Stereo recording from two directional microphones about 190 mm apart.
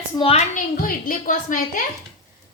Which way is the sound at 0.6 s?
45° left (ahead or behind).